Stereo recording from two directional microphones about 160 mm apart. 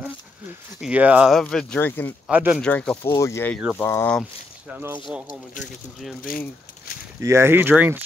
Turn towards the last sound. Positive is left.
turn(degrees=-10)  # may be behind; listen again after turning